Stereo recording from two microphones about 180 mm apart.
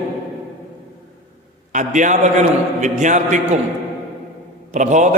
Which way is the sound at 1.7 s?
45° right (ahead or behind).